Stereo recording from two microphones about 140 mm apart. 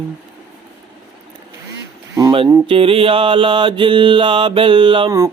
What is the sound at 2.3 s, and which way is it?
Speech, 40° right (ahead or behind).